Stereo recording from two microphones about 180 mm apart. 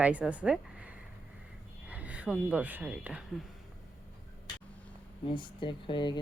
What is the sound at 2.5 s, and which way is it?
Speech, 10° right (ahead or behind).